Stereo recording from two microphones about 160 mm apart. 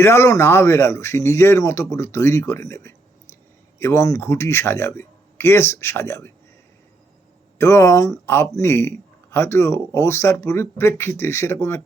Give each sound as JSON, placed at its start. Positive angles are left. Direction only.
{"t": 0.0, "sound": "speech", "side_deg": 15}
{"t": 7.6, "sound": "speech", "side_deg": 20}